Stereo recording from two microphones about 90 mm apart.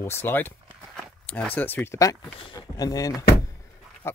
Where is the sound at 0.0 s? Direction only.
25° left (ahead or behind).